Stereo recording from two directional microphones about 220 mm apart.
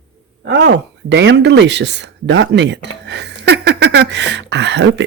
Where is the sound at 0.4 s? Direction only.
55° right (ahead or behind).